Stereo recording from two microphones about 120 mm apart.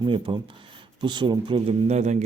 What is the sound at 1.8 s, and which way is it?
Speech, 70° right (ahead or behind).